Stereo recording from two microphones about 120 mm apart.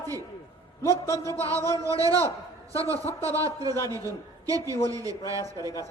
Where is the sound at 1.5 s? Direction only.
25° left (ahead or behind).